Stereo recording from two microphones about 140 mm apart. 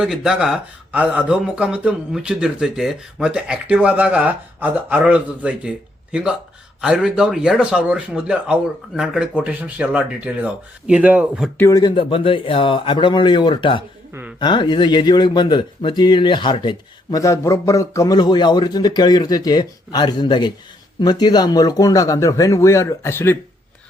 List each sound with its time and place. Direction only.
0.0 s speech: 5° right (ahead or behind)
11.5 s speech: 15° left (ahead or behind)
11.8 s speech: 35° left (ahead or behind)
14.1 s speech: 15° right (ahead or behind)
14.3 s speech: 35° left (ahead or behind); by 23.4 s 15° left (ahead or behind)